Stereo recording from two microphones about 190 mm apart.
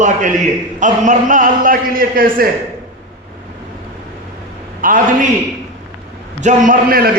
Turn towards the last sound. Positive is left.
turn(degrees=-45)  # may be behind; listen again after turning